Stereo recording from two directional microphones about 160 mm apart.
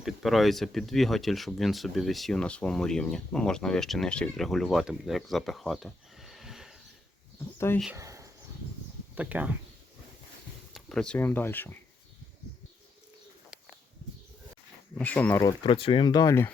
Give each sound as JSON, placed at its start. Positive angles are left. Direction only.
{"t": 0.0, "sound": "speech", "side_deg": 0}
{"t": 7.3, "sound": "a sound", "side_deg": 15}
{"t": 7.9, "sound": "a sound", "side_deg": -20}
{"t": 9.1, "sound": "speech", "side_deg": -10}
{"t": 10.8, "sound": "speech", "side_deg": 5}
{"t": 14.9, "sound": "speech", "side_deg": 10}
{"t": 15.4, "sound": "speech", "side_deg": 35}